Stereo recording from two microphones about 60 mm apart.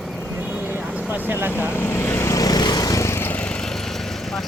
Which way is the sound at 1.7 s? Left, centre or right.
Left.